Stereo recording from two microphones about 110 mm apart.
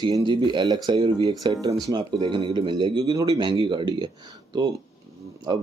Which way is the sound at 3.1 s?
30° right (ahead or behind).